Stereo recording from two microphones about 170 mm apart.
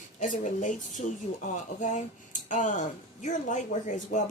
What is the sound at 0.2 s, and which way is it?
Speech, 50° left (ahead or behind).